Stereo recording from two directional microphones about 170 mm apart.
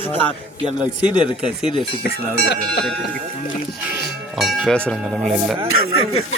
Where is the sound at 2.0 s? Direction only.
75° left (ahead or behind).